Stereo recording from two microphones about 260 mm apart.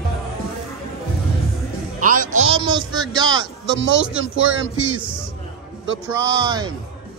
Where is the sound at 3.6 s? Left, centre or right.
Right.